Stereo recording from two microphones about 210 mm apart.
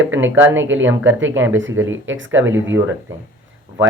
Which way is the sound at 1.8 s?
65° right (ahead or behind).